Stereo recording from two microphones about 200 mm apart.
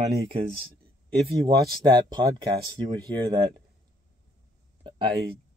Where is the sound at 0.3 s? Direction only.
25° right (ahead or behind).